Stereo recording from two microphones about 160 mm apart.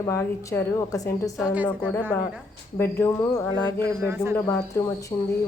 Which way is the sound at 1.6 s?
10° left (ahead or behind).